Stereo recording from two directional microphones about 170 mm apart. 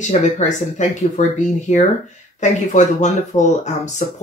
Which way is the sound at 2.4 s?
45° left (ahead or behind).